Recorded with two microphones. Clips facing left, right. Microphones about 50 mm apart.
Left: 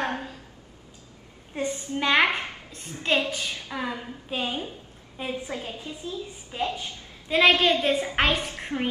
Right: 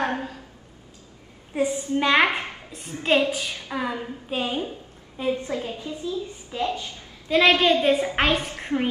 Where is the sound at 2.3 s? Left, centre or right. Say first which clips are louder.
Right 2 dB; right.